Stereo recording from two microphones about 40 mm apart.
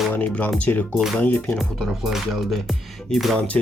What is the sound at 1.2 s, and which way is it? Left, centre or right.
Speech, left.